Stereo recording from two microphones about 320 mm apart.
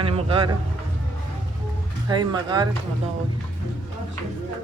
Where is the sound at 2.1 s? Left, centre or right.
Centre.